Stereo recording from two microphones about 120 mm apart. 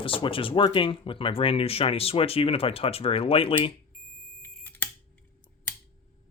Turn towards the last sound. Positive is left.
turn(degrees=15)  # may be behind; listen again after turning